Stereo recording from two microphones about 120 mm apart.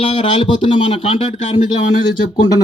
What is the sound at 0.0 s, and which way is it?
A man's voice, 50° left (ahead or behind).